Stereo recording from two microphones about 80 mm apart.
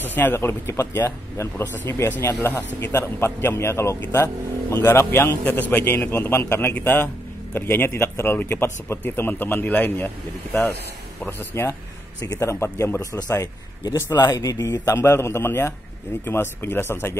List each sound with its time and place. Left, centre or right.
0.0 s speech: left
5.4 s speech: left
11.2 s speech: left
14.2 s a man's voice: left